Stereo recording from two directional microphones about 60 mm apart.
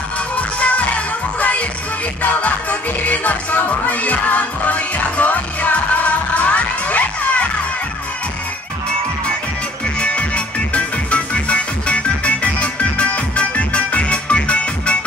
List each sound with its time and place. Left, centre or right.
0.4 s music: left
3.0 s music: left
9.9 s music: centre